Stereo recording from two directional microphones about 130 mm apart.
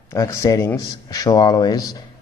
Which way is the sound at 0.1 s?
25° left (ahead or behind).